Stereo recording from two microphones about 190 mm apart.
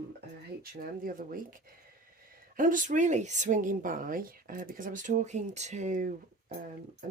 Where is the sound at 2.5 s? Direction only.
45° right (ahead or behind).